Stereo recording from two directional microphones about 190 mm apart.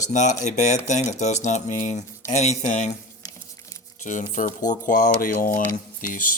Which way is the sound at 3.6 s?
15° left (ahead or behind).